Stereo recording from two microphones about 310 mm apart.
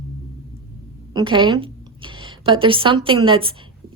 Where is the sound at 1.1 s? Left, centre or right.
Centre.